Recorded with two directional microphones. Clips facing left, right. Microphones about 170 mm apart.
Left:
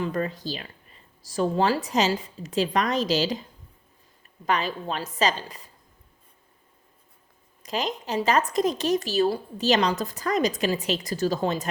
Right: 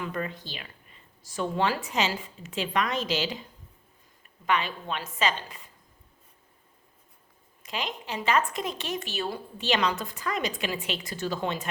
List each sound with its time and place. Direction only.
0.0 s a woman's voice: 35° left (ahead or behind)
7.6 s a woman's voice: 40° left (ahead or behind)